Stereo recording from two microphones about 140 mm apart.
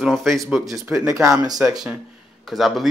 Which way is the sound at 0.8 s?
20° right (ahead or behind).